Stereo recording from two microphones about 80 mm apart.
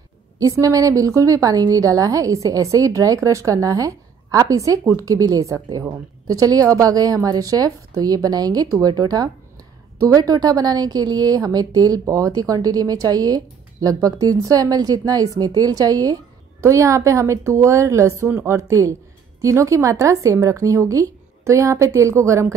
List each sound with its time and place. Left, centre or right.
0.4 s a woman's voice: right
16.6 s speech: right
18.3 s a woman's voice: right
18.6 s speech: right